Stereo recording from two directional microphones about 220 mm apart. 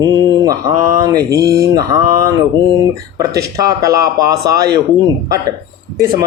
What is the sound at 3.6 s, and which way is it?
Speech, 15° right (ahead or behind).